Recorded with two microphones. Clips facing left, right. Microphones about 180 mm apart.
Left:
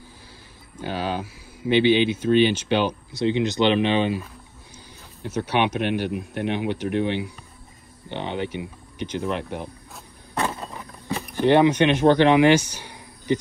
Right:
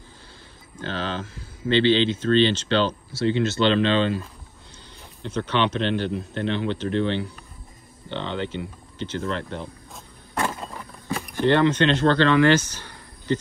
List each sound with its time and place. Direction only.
0.7 s speech: 10° left (ahead or behind)
11.3 s speech: 15° left (ahead or behind)